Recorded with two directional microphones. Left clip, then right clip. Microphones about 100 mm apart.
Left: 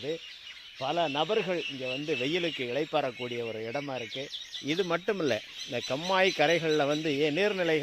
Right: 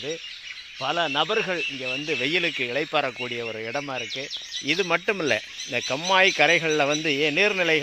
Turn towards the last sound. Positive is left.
turn(degrees=-40)  # may be behind; listen again after turning